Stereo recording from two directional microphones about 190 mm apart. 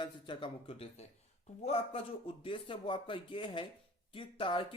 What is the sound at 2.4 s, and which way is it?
Speech, 25° left (ahead or behind).